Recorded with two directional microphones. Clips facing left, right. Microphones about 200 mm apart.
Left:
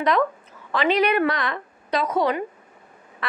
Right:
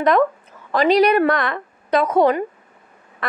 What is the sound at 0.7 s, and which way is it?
A woman's voice, 40° right (ahead or behind).